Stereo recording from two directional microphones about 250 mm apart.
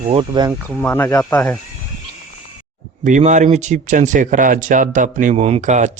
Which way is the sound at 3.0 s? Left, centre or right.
Right.